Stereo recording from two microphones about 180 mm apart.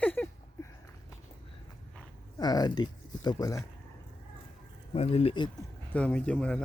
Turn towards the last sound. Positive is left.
turn(degrees=5)  # may be behind; listen again after turning